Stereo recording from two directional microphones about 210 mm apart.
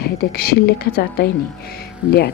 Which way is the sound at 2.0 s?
5° right (ahead or behind).